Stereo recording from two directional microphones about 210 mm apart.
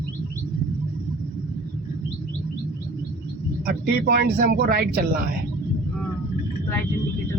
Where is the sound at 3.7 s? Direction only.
45° right (ahead or behind).